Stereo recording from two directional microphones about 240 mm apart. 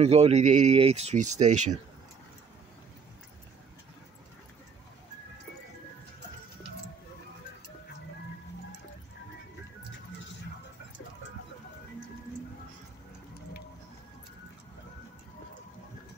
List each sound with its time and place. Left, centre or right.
0.0 s speech: right